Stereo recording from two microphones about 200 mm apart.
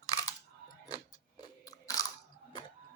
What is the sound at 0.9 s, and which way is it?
Biting, 20° left (ahead or behind).